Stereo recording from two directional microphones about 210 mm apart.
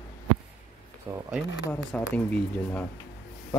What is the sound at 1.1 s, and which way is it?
Speech, 15° right (ahead or behind).